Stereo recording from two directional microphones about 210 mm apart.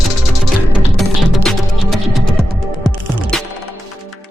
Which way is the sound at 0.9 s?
Centre (ahead or behind).